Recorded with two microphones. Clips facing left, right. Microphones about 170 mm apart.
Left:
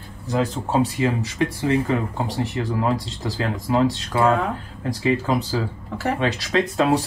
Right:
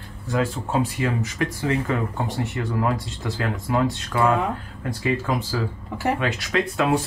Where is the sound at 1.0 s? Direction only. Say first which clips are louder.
Left 3 dB; 25° left (ahead or behind).